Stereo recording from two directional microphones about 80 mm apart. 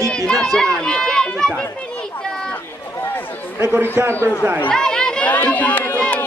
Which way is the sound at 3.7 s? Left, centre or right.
Right.